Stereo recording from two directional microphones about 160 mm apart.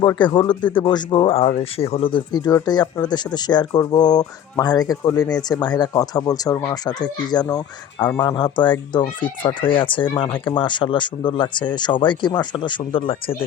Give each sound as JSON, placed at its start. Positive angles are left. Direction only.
{"t": 0.2, "sound": "speech", "side_deg": 30}